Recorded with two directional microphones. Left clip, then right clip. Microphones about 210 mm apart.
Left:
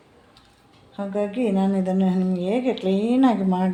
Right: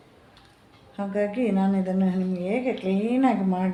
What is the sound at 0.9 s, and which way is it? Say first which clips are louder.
A woman's voice: left 1 dB; 25° left (ahead or behind).